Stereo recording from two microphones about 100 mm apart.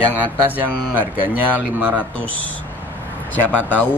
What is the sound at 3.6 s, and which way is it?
Speech, 15° left (ahead or behind).